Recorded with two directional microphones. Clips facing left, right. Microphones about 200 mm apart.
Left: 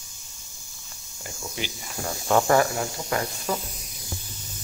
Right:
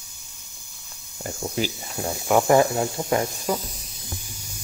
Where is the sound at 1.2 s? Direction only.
40° right (ahead or behind).